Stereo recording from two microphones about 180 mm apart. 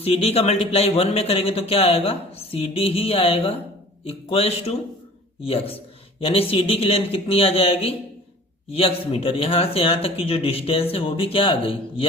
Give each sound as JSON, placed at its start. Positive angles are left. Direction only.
{"t": 0.0, "sound": "speech", "side_deg": 35}